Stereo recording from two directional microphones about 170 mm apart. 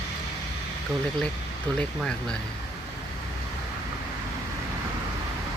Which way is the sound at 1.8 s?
5° left (ahead or behind).